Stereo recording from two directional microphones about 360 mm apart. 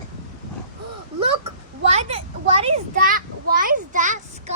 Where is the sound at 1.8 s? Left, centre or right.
Centre.